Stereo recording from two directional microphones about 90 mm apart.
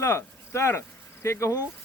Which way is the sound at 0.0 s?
30° left (ahead or behind).